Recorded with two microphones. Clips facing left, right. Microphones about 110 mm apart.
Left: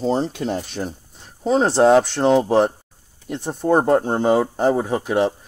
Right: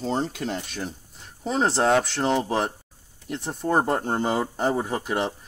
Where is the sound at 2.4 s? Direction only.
35° left (ahead or behind).